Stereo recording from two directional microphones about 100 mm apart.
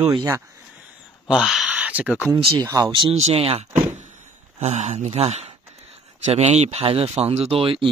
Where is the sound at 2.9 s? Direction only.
55° right (ahead or behind).